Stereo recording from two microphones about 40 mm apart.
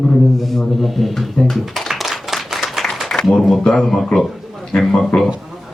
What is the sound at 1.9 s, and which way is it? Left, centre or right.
Clapping, centre.